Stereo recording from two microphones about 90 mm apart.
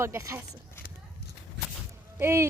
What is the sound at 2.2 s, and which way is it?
Speech, 30° right (ahead or behind).